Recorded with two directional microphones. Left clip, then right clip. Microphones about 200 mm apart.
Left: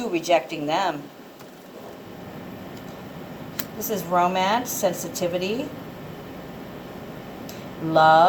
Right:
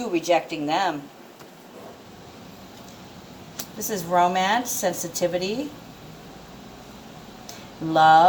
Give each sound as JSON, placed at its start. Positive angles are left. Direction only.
{"t": 0.0, "sound": "a woman's voice", "side_deg": -30}
{"t": 3.8, "sound": "a woman's voice", "side_deg": -30}
{"t": 7.9, "sound": "a woman's voice", "side_deg": -30}